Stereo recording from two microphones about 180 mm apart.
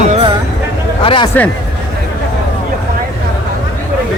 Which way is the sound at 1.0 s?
30° left (ahead or behind).